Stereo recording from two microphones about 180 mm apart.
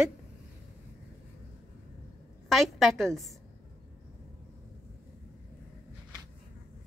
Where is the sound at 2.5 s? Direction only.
Centre (ahead or behind).